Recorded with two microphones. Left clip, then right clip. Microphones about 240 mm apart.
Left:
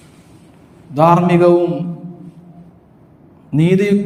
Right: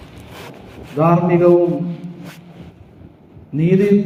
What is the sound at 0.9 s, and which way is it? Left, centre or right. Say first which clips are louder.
Speech: left 4 dB; left.